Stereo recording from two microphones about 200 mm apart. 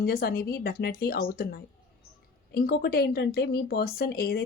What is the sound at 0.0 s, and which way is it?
Speech, 50° left (ahead or behind).